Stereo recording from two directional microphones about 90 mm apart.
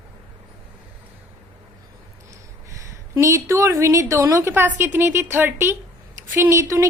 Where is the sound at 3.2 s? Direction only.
30° right (ahead or behind).